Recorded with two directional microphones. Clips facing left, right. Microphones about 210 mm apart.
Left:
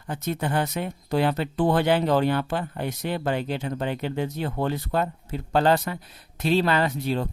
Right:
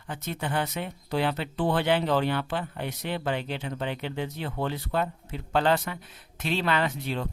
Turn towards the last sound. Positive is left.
turn(degrees=40)  # may be behind; listen again after turning